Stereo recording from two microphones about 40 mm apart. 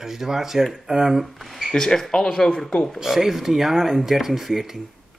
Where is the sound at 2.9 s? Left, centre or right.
Centre.